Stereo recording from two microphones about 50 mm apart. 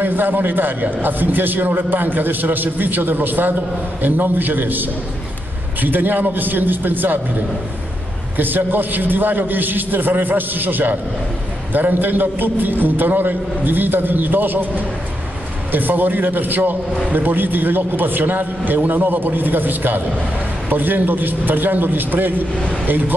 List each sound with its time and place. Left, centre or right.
0.0 s a man's voice: right
8.4 s a man's voice: right